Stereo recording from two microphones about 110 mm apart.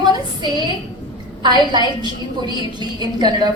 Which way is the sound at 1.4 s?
40° right (ahead or behind).